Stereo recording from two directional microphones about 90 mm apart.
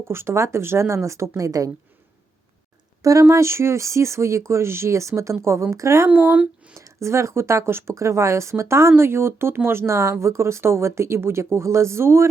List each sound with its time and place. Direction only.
0.1 s speech: 30° right (ahead or behind)
3.0 s speech: 40° right (ahead or behind)
6.1 s speech: 15° right (ahead or behind)
6.7 s speech: 35° right (ahead or behind)